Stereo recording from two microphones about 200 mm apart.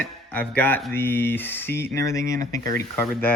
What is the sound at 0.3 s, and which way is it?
Speech, 10° left (ahead or behind).